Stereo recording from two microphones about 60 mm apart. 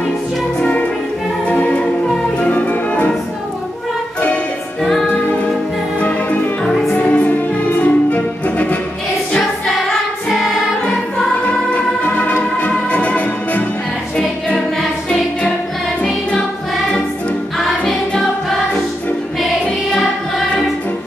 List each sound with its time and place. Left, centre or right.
1.5 s music: left
5.9 s music: left
6.6 s music: centre
7.0 s music: left
9.7 s music: centre
11.4 s music: left
16.0 s music: centre
17.6 s music: centre